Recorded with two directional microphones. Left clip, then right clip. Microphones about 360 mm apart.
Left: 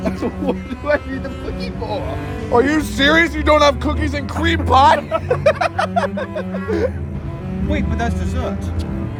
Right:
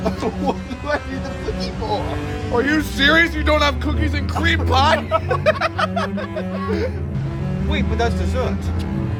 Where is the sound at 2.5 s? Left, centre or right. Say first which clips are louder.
Left 3 dB; centre.